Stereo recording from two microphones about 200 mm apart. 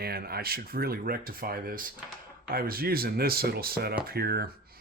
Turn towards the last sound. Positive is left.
turn(degrees=-50)  # may be behind; listen again after turning